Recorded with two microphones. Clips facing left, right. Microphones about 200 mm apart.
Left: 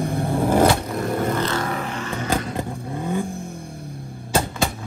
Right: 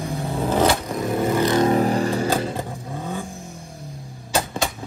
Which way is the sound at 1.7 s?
35° right (ahead or behind).